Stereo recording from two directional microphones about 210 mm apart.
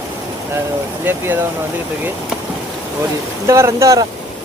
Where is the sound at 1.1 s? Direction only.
10° right (ahead or behind).